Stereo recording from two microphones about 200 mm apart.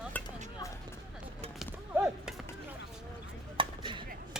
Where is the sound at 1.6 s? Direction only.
5° right (ahead or behind).